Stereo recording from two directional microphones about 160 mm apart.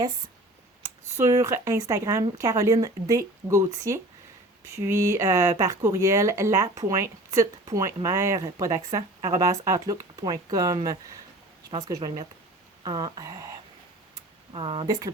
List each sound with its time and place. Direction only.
1.1 s speech: 20° right (ahead or behind)
14.5 s speech: 35° right (ahead or behind)
14.8 s speech: 25° right (ahead or behind)